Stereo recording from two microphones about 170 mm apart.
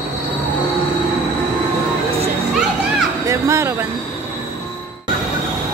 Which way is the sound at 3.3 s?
15° right (ahead or behind).